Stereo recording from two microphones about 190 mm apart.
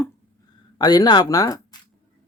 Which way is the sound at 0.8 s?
20° left (ahead or behind).